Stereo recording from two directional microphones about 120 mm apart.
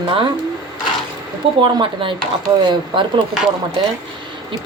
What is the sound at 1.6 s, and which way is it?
A woman's voice, 45° right (ahead or behind).